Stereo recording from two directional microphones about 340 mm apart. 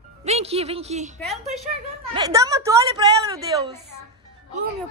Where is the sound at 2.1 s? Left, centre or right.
Centre.